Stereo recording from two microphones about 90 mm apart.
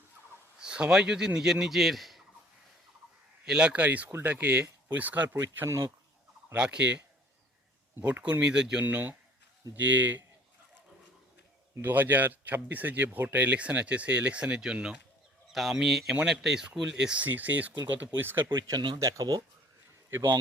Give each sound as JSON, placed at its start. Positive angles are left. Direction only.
{"t": 0.6, "sound": "speech", "side_deg": -10}
{"t": 3.4, "sound": "speech", "side_deg": -10}
{"t": 6.5, "sound": "speech", "side_deg": -10}
{"t": 8.2, "sound": "speech", "side_deg": -10}
{"t": 9.6, "sound": "speech", "side_deg": -35}
{"t": 11.8, "sound": "speech", "side_deg": -20}
{"t": 18.5, "sound": "speech", "side_deg": -50}
{"t": 18.9, "sound": "speech", "side_deg": -40}
{"t": 20.1, "sound": "speech", "side_deg": -30}